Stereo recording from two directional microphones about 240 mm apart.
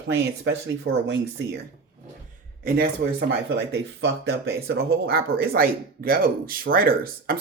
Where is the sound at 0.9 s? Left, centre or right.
Right.